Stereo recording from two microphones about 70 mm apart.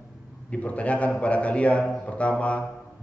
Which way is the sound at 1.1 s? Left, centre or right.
Centre.